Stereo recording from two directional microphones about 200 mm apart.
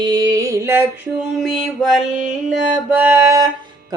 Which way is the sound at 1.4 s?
Centre (ahead or behind).